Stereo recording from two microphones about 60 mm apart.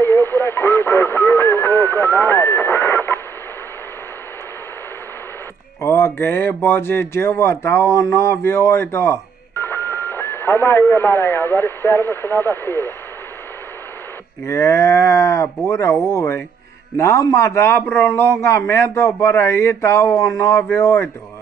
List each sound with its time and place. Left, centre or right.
0.0 s speech: left
5.8 s speech: left
14.4 s a man's voice: left